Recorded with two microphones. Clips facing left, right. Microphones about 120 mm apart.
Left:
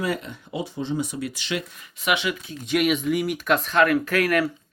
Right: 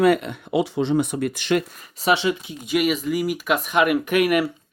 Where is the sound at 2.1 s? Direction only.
30° right (ahead or behind).